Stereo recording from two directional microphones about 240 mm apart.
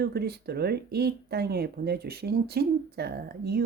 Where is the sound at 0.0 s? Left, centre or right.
Right.